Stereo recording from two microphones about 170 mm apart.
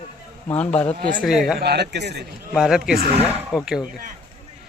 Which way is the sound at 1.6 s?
75° right (ahead or behind).